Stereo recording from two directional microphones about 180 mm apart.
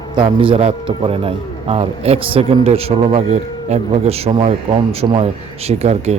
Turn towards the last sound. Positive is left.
turn(degrees=-35)  # may be behind; listen again after turning